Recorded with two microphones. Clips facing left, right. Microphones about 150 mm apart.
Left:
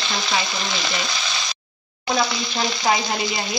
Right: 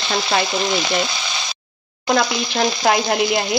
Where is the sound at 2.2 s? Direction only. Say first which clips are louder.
Right 2 dB; 65° right (ahead or behind).